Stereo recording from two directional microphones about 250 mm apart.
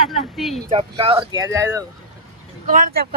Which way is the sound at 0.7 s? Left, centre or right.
Right.